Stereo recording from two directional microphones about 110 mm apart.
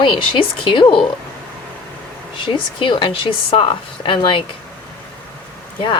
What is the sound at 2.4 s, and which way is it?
Speech, 50° left (ahead or behind).